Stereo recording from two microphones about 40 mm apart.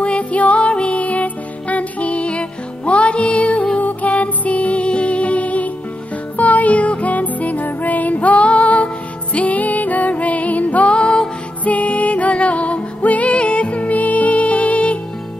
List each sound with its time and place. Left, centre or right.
0.0 s music: left